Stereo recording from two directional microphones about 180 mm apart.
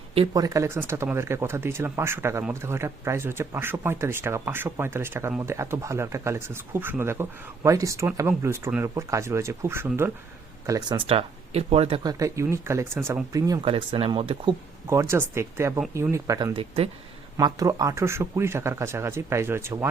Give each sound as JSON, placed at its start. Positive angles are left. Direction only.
{"t": 0.3, "sound": "speech", "side_deg": -20}
{"t": 10.7, "sound": "speech", "side_deg": -25}
{"t": 12.0, "sound": "speech", "side_deg": -15}
{"t": 13.6, "sound": "speech", "side_deg": -30}
{"t": 14.8, "sound": "speech", "side_deg": -15}
{"t": 17.3, "sound": "speech", "side_deg": -20}